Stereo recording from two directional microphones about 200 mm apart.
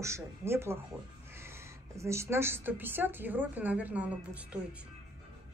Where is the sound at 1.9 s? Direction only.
15° right (ahead or behind).